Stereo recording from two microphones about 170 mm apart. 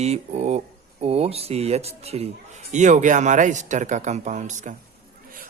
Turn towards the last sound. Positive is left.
turn(degrees=-45)  # may be behind; listen again after turning